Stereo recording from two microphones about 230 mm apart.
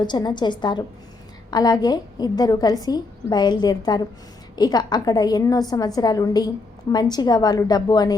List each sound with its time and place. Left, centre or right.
0.0 s a woman's voice: centre